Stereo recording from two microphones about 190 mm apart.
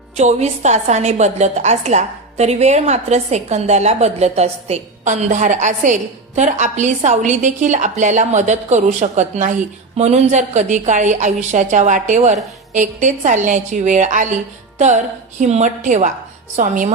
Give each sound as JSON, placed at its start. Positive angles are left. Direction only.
{"t": 0.2, "sound": "a woman's voice", "side_deg": -35}